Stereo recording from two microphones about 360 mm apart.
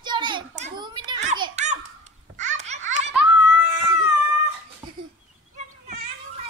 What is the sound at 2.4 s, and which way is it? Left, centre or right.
Laughter, centre.